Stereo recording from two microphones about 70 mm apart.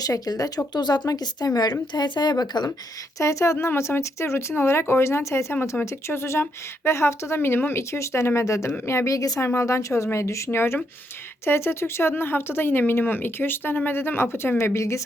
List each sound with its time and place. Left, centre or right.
0.0 s speech: left
0.7 s speech: left
1.9 s speech: left
3.2 s a woman's voice: left
9.4 s a woman's voice: left